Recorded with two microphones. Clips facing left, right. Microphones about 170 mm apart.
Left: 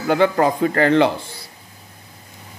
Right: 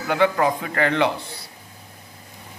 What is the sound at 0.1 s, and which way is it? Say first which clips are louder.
A man's voice: left 3 dB; 35° left (ahead or behind).